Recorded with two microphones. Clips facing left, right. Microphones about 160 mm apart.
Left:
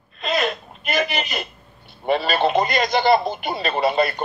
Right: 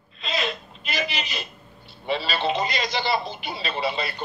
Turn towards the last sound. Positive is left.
turn(degrees=50)  # may be behind; listen again after turning